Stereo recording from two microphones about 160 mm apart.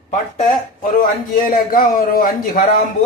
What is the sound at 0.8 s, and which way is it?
A man's voice, 60° left (ahead or behind).